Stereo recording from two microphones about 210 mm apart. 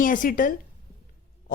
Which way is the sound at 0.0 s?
40° left (ahead or behind).